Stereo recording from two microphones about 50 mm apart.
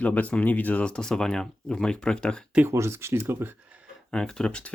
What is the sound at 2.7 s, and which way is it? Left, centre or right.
Speech, right.